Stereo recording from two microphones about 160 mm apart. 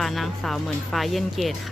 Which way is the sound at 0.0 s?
Centre (ahead or behind).